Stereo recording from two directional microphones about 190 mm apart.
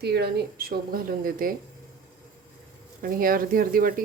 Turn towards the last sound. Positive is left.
turn(degrees=-50)  # may be behind; listen again after turning